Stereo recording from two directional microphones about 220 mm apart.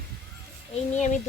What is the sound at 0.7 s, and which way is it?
Speech, 35° left (ahead or behind).